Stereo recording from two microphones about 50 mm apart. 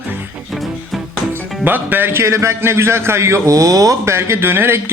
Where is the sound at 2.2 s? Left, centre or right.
Right.